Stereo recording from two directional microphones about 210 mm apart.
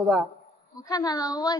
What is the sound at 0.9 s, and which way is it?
Speech, 20° left (ahead or behind).